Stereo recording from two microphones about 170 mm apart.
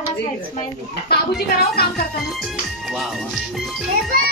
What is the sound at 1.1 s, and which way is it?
Speech, 65° left (ahead or behind).